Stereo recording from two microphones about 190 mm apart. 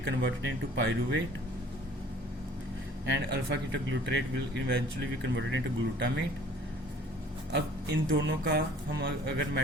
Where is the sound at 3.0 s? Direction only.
65° right (ahead or behind).